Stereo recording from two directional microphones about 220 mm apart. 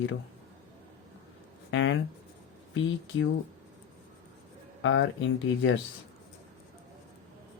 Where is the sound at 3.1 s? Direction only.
60° left (ahead or behind).